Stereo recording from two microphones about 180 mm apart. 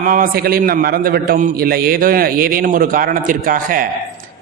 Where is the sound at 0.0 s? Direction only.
50° right (ahead or behind).